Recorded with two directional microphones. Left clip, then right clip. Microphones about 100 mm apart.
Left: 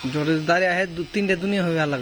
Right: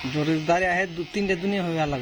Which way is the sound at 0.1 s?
45° left (ahead or behind).